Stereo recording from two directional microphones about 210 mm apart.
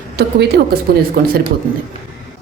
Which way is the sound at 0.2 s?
50° right (ahead or behind).